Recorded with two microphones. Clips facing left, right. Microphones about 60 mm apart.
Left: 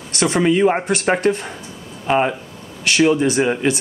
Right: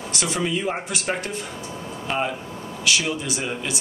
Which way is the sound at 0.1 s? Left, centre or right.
Left.